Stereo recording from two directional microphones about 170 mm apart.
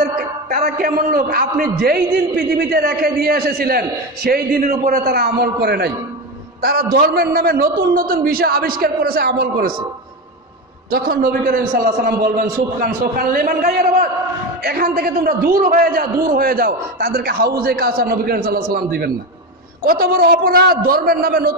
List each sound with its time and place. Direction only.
0.5 s a man's voice: 60° right (ahead or behind)
10.9 s a man's voice: 60° right (ahead or behind)